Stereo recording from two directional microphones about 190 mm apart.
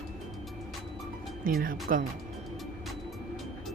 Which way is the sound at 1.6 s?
50° right (ahead or behind).